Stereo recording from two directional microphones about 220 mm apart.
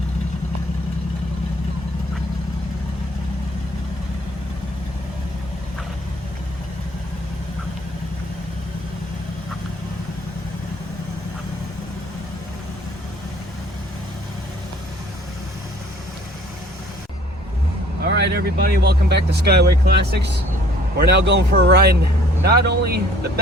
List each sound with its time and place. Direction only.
18.0 s speech: 45° right (ahead or behind)